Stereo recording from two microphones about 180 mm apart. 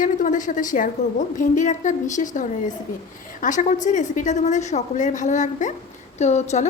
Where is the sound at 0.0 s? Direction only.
45° left (ahead or behind).